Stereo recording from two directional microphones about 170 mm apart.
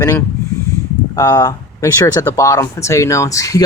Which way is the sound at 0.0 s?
15° left (ahead or behind).